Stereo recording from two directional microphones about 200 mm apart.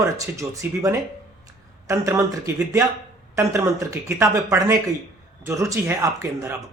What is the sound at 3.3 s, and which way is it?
Speech, 15° right (ahead or behind).